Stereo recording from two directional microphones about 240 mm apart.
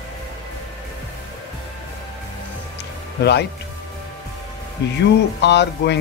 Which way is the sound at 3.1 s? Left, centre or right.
Left.